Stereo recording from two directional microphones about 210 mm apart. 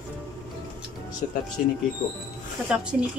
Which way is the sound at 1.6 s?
40° left (ahead or behind).